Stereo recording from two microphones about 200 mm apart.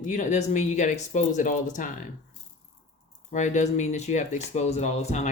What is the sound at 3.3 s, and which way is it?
Speech, 35° left (ahead or behind).